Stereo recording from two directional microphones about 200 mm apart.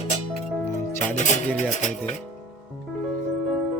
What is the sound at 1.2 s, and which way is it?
Speech, 35° left (ahead or behind).